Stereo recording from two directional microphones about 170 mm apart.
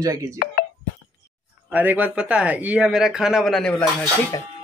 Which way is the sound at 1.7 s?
10° right (ahead or behind).